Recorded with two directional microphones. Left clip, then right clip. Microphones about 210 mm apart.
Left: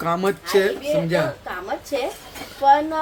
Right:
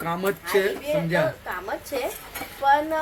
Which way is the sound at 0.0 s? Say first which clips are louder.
Left 4 dB; 10° left (ahead or behind).